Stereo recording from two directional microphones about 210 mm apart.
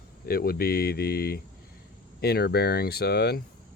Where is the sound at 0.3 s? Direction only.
45° left (ahead or behind).